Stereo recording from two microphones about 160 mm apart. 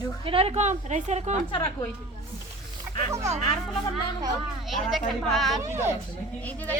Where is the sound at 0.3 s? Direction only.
40° right (ahead or behind).